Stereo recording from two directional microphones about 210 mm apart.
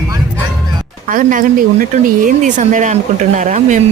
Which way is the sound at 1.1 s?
40° right (ahead or behind).